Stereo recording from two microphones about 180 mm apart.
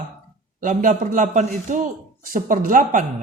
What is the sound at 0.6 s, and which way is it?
A man's voice, 45° right (ahead or behind).